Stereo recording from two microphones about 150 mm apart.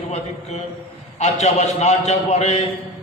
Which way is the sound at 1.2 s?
50° left (ahead or behind).